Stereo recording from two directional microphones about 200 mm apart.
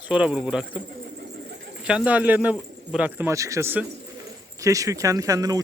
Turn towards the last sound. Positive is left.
turn(degrees=-20)  # may be behind; listen again after turning